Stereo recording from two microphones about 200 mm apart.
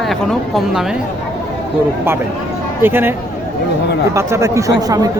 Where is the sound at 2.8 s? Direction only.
10° right (ahead or behind).